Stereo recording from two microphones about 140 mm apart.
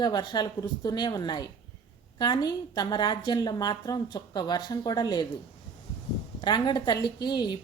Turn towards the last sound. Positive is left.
turn(degrees=30)  # may be behind; listen again after turning